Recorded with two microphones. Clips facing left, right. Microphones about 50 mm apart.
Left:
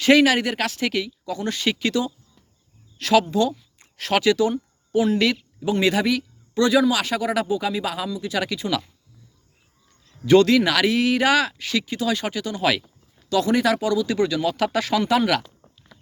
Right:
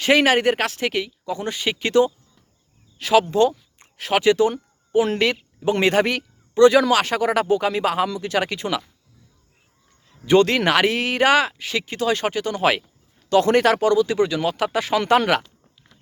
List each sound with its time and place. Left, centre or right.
0.0 s speech: right
1.8 s speech: right
3.2 s speech: right
3.9 s speech: centre
4.2 s a man's voice: right
10.4 s speech: right
13.3 s speech: right
14.9 s speech: right